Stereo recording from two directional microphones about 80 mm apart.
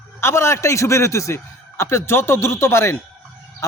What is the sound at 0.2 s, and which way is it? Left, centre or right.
A man's voice, left.